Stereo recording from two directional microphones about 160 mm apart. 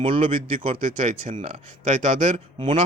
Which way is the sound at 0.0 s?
35° right (ahead or behind).